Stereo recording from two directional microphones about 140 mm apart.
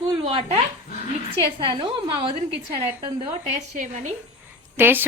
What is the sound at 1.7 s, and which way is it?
Speech, 35° right (ahead or behind).